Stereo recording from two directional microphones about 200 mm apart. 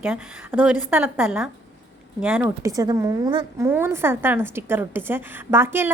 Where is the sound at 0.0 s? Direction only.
10° right (ahead or behind).